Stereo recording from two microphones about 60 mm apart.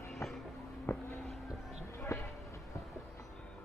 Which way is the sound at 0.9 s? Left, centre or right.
Left.